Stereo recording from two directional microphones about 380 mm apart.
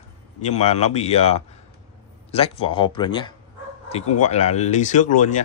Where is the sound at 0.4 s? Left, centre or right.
Centre.